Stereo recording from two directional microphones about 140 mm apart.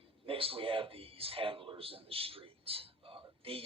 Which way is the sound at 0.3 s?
40° right (ahead or behind).